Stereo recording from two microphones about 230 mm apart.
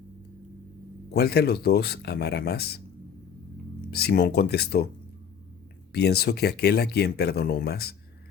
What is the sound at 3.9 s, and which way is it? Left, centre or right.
Speech, left.